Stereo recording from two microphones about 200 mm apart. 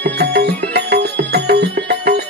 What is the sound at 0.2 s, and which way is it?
Music, 55° right (ahead or behind).